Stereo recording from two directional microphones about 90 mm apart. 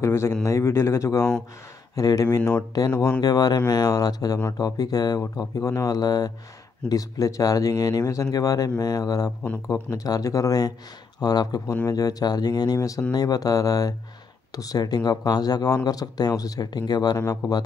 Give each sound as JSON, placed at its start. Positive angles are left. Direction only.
{"t": 0.0, "sound": "speech", "side_deg": 30}